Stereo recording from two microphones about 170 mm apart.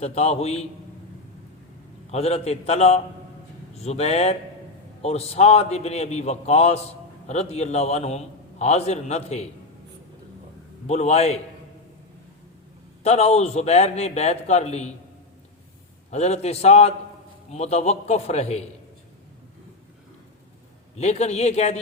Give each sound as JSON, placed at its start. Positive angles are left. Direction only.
{"t": 0.0, "sound": "a man's voice", "side_deg": 40}
{"t": 2.0, "sound": "a man's voice", "side_deg": 40}
{"t": 10.8, "sound": "a man's voice", "side_deg": 40}
{"t": 13.0, "sound": "a man's voice", "side_deg": 40}
{"t": 16.0, "sound": "a man's voice", "side_deg": 40}
{"t": 20.9, "sound": "a man's voice", "side_deg": 40}